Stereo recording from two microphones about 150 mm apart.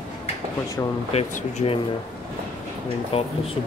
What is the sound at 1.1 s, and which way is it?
Speech, 45° left (ahead or behind).